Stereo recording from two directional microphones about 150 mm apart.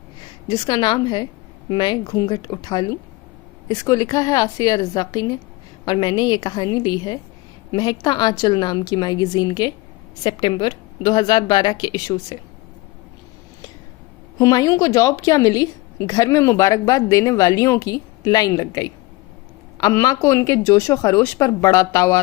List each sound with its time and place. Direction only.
0.2 s a woman's voice: 30° left (ahead or behind)
14.3 s a woman's voice: 25° left (ahead or behind)